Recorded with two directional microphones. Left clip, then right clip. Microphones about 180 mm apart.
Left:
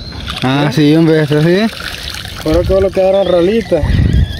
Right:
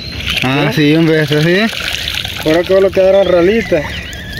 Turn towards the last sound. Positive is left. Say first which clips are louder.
# right 1 dB
turn(degrees=15)  # may be behind; listen again after turning